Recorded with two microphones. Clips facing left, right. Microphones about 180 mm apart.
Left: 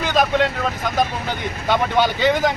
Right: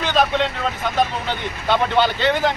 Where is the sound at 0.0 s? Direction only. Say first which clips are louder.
Left 1 dB; 10° left (ahead or behind).